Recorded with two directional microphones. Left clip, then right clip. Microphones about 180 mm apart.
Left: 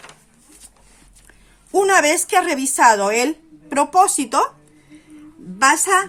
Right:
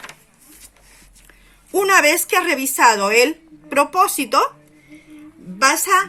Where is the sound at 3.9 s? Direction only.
45° left (ahead or behind).